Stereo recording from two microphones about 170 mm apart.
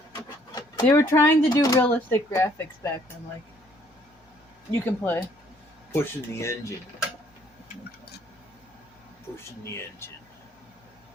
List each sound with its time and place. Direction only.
0.1 s a sound: 25° left (ahead or behind)
0.9 s speech: 20° left (ahead or behind)
4.7 s speech: 15° left (ahead or behind)
10.0 s speech: 15° left (ahead or behind)